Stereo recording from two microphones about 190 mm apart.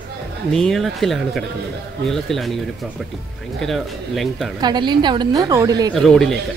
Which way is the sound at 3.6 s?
Centre (ahead or behind).